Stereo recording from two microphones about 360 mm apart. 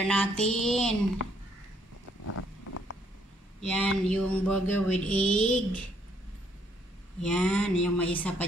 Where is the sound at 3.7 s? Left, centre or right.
Centre.